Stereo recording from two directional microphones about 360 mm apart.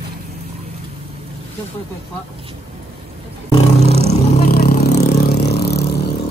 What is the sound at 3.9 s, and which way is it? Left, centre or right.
Vehicle, centre.